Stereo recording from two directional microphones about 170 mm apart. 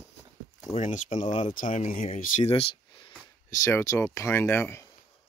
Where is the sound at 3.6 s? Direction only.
15° left (ahead or behind).